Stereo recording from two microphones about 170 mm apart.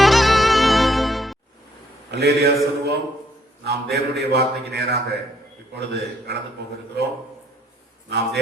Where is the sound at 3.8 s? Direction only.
75° right (ahead or behind).